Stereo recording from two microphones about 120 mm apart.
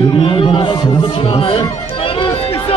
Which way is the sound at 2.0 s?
45° left (ahead or behind).